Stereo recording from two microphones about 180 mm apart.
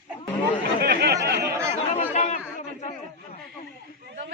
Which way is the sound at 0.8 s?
60° right (ahead or behind).